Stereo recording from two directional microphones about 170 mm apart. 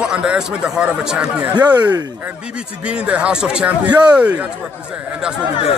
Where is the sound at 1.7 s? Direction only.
25° right (ahead or behind).